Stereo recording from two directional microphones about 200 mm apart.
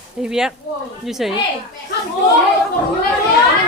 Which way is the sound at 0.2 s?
5° right (ahead or behind).